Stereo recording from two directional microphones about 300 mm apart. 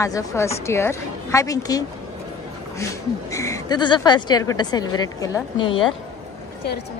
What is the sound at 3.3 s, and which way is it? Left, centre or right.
Speech, centre.